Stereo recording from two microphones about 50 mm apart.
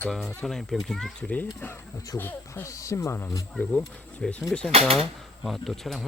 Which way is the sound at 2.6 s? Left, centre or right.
Left.